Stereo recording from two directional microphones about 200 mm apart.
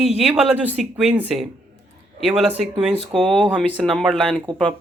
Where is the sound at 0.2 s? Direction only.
5° right (ahead or behind).